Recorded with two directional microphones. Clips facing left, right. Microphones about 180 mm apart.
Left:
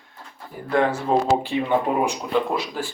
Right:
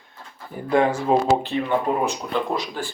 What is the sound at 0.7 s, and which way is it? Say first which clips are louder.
Speech: right 2 dB; 15° right (ahead or behind).